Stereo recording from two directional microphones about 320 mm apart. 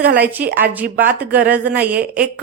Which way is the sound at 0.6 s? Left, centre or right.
Centre.